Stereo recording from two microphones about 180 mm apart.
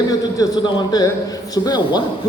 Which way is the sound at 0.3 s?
20° left (ahead or behind).